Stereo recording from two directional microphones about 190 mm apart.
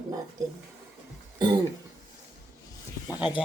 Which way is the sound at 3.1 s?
25° left (ahead or behind).